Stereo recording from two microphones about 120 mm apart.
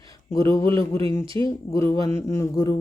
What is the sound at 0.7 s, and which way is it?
Speech, 50° right (ahead or behind).